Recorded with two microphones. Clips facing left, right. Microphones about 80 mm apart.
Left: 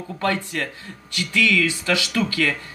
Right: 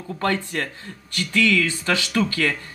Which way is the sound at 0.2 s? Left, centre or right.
Right.